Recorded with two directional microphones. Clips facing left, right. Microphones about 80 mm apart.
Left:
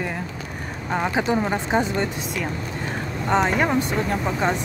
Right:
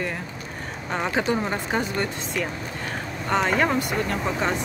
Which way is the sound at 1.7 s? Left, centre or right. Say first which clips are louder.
Left 4 dB; left.